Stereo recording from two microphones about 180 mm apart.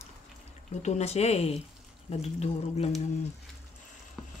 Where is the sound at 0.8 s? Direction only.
40° left (ahead or behind).